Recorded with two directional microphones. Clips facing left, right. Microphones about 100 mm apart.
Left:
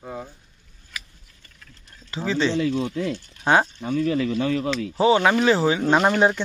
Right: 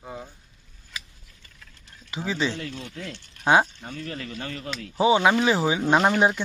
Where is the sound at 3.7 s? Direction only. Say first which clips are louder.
Left 13 dB; 60° left (ahead or behind).